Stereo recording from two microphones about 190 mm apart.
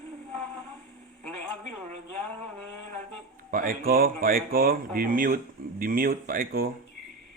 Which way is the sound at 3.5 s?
50° right (ahead or behind).